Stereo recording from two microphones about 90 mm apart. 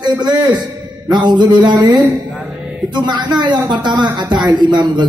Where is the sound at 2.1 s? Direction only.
15° right (ahead or behind).